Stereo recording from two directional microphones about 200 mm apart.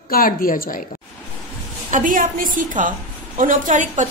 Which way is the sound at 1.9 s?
40° right (ahead or behind).